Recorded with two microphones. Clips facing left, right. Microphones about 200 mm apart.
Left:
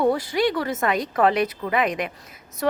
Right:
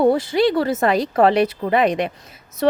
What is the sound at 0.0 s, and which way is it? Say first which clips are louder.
A woman's voice: right 5 dB; 25° right (ahead or behind).